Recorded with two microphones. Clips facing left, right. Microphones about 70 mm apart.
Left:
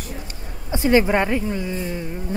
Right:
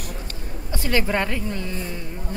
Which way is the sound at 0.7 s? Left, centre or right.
Left.